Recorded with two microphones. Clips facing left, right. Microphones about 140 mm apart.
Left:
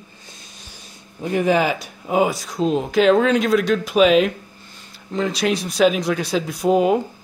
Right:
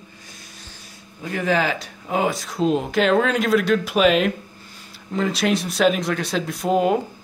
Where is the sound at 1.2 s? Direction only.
20° left (ahead or behind); by 6.9 s centre (ahead or behind).